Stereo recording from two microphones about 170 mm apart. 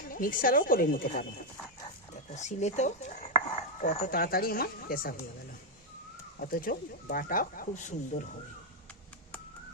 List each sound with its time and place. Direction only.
0.1 s speech: 55° left (ahead or behind)
2.3 s speech: 45° left (ahead or behind); by 5.1 s 60° left (ahead or behind)
6.4 s speech: 55° left (ahead or behind)